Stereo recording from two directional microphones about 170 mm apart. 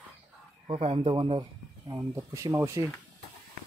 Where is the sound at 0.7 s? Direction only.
35° right (ahead or behind).